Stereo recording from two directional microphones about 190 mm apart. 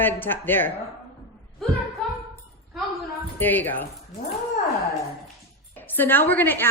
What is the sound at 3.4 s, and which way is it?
Speech, 10° left (ahead or behind).